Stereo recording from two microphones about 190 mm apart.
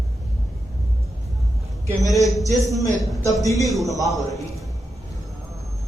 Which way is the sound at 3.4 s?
15° left (ahead or behind).